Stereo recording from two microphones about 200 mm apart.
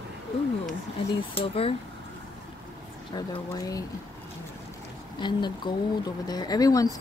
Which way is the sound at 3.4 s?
15° left (ahead or behind).